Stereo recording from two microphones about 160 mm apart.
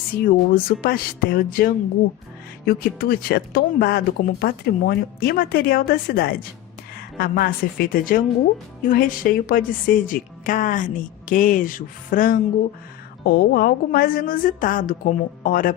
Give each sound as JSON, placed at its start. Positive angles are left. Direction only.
{"t": 0.1, "sound": "a woman's voice", "side_deg": 65}
{"t": 13.2, "sound": "a woman's voice", "side_deg": 80}